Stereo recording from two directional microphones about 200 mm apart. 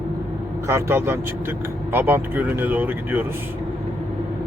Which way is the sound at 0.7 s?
10° right (ahead or behind).